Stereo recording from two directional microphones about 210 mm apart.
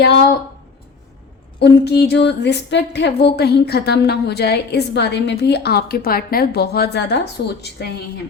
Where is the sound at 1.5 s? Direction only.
50° left (ahead or behind).